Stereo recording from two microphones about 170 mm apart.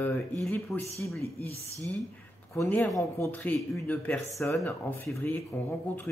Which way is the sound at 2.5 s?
15° left (ahead or behind).